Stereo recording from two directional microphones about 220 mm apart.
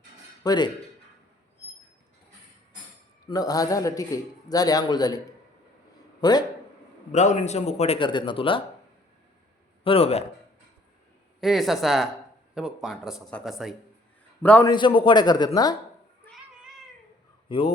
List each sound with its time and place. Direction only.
0.4 s a man's voice: 20° left (ahead or behind)
3.2 s a man's voice: 15° left (ahead or behind)
7.1 s a man's voice: 35° left (ahead or behind)
9.8 s a man's voice: 25° left (ahead or behind)
11.3 s a man's voice: centre (ahead or behind)
14.7 s a man's voice: 20° left (ahead or behind)
16.2 s cat: centre (ahead or behind)
17.5 s a man's voice: 20° left (ahead or behind)